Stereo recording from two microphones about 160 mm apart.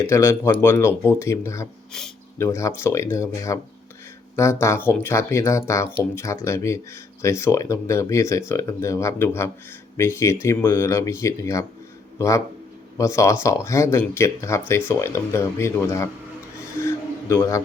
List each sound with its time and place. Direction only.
0.0 s speech: 15° left (ahead or behind)
4.6 s speech: 15° left (ahead or behind)
13.0 s speech: 20° left (ahead or behind)
16.8 s a sound: 15° left (ahead or behind)